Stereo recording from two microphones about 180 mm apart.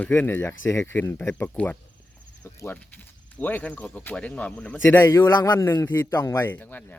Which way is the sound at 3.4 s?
10° left (ahead or behind).